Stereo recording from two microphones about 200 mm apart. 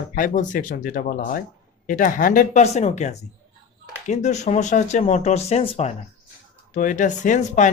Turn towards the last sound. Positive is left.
turn(degrees=40)  # may be behind; listen again after turning